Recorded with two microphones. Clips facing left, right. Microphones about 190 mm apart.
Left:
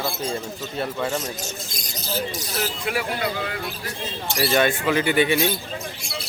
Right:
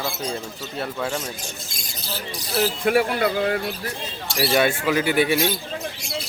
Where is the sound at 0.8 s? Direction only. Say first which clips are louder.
Left 1 dB; 5° left (ahead or behind).